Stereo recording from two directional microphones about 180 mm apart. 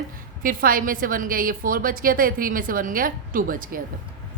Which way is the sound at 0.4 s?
50° right (ahead or behind).